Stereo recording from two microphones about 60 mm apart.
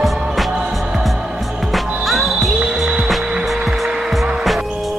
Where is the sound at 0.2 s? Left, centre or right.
Centre.